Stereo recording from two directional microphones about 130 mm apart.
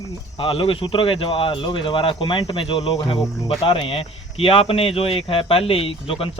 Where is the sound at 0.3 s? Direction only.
45° left (ahead or behind).